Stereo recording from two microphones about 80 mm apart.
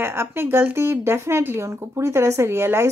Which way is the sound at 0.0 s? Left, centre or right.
Right.